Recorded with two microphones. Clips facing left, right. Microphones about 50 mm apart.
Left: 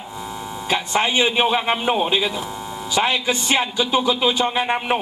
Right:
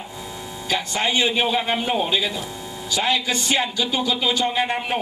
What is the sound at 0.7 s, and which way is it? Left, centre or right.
Speech, left.